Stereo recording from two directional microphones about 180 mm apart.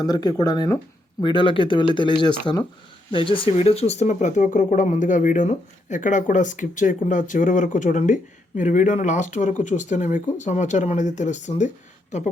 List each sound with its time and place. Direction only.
0.0 s speech: 20° left (ahead or behind); by 11.7 s 40° left (ahead or behind)